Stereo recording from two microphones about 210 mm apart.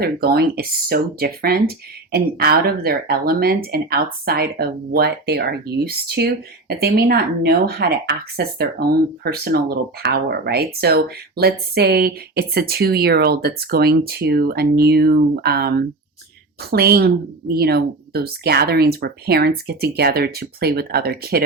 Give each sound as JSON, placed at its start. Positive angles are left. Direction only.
{"t": 0.0, "sound": "speech", "side_deg": -50}